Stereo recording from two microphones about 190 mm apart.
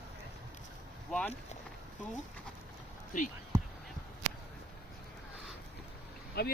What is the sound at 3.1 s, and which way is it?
Speech, 45° left (ahead or behind).